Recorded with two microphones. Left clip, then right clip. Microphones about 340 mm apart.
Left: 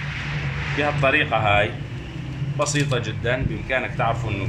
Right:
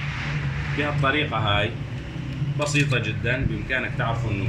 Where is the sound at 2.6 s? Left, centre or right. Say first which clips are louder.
Left 1 dB; centre.